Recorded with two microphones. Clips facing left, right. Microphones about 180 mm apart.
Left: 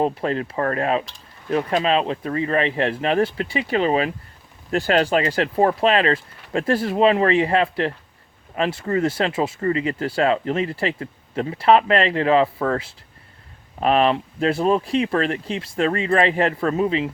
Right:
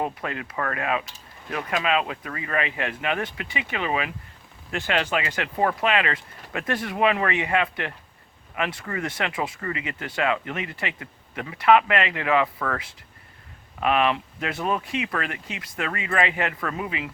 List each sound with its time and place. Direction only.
0.0 s speech: 35° left (ahead or behind)